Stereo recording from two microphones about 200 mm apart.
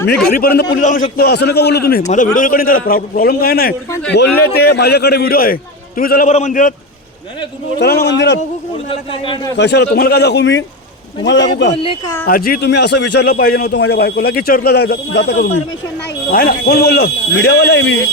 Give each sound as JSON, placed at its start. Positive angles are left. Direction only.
{"t": 0.1, "sound": "a man's voice", "side_deg": 50}
{"t": 2.0, "sound": "a man's voice", "side_deg": 40}
{"t": 7.8, "sound": "a man's voice", "side_deg": 55}
{"t": 8.9, "sound": "a man's voice", "side_deg": 25}
{"t": 9.6, "sound": "a man's voice", "side_deg": 55}
{"t": 11.7, "sound": "a man's voice", "side_deg": 25}
{"t": 12.2, "sound": "a man's voice", "side_deg": 50}